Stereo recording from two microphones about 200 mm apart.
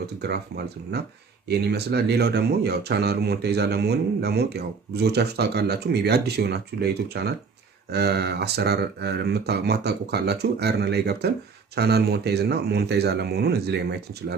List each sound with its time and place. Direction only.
0.0 s speech: 55° right (ahead or behind)